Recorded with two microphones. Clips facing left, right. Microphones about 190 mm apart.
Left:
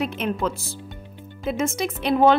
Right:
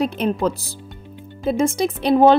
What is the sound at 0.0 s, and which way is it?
Speech, 35° right (ahead or behind).